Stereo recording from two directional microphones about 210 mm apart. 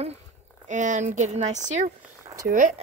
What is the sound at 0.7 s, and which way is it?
Speech, 35° right (ahead or behind).